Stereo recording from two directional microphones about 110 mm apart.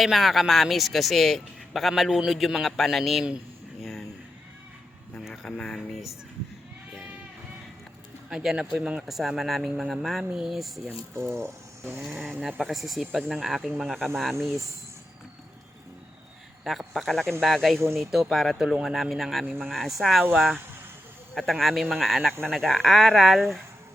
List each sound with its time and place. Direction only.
0.0 s a man's voice: centre (ahead or behind)
5.2 s speech: 5° left (ahead or behind)
8.3 s a man's voice: 5° right (ahead or behind)
10.8 s speech: 20° right (ahead or behind)
11.9 s a man's voice: centre (ahead or behind)
16.6 s a man's voice: centre (ahead or behind)
19.5 s speech: 15° right (ahead or behind)
19.7 s a man's voice: centre (ahead or behind)